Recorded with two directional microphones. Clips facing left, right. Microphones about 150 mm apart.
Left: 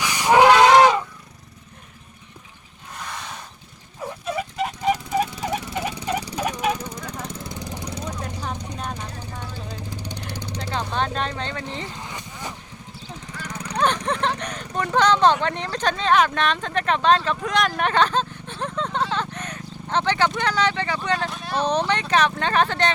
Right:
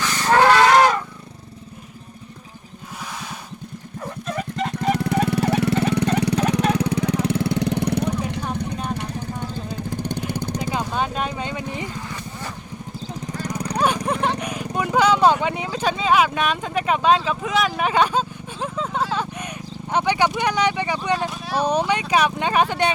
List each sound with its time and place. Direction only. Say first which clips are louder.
0.0 s cattle: left 1 dB; 15° left (ahead or behind)
4.0 s a sound: left 1 dB; 10° left (ahead or behind)
5.2 s a sound: right 7 dB; 70° right (ahead or behind)
6.7 s vehicle: right 11 dB; 70° right (ahead or behind)
8.7 s vehicle: right 4 dB; 5° right (ahead or behind)
9.9 s vehicle: right 8 dB; 50° right (ahead or behind)
10.6 s vehicle: left 1 dB; 5° right (ahead or behind)
12.0 s vehicle: right 2 dB; 15° left (ahead or behind)
13.7 s horse: even; 10° right (ahead or behind)